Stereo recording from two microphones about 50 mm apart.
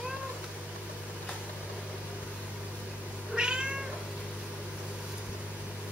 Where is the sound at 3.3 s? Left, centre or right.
Centre.